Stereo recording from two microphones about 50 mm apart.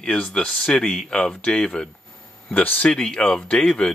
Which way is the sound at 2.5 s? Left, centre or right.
Left.